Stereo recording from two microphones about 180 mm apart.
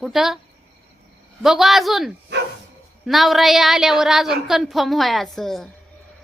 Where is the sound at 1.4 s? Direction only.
Centre (ahead or behind).